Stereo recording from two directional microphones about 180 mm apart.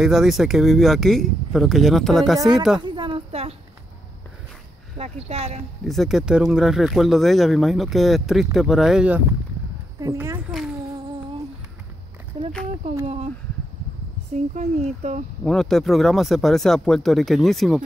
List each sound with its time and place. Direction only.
0.0 s speech: 5° right (ahead or behind)
2.8 s a sound: 25° right (ahead or behind)
4.9 s speech: 35° right (ahead or behind)
5.9 s speech: centre (ahead or behind)
9.9 s speech: 15° right (ahead or behind)
12.3 s a sound: 30° right (ahead or behind)
13.0 s speech: 35° right (ahead or behind)
14.3 s speech: 40° right (ahead or behind)
15.4 s speech: centre (ahead or behind)